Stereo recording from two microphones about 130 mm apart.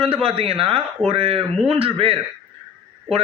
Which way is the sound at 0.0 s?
50° right (ahead or behind).